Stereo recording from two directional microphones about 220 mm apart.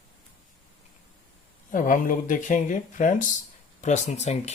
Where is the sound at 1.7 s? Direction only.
35° left (ahead or behind).